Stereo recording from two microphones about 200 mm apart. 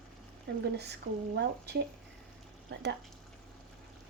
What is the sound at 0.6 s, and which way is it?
Speech, 55° right (ahead or behind).